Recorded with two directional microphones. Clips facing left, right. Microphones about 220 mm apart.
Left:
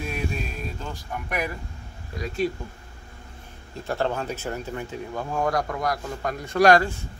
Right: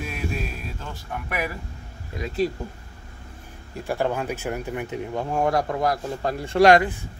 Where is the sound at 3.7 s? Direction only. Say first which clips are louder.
Right 2 dB; 10° right (ahead or behind).